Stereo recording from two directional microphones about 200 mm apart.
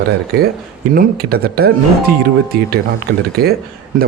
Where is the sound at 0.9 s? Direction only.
50° right (ahead or behind).